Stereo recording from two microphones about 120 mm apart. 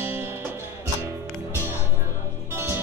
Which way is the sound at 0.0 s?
20° right (ahead or behind).